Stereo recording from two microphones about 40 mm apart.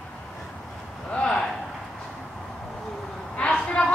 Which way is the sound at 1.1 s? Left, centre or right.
Left.